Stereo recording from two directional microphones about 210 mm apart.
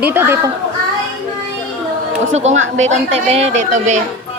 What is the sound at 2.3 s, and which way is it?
A woman's voice, 30° right (ahead or behind).